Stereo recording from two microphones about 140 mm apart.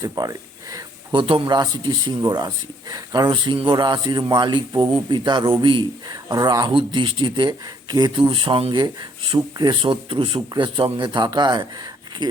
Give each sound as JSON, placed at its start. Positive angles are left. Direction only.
{"t": 0.0, "sound": "speech", "side_deg": -25}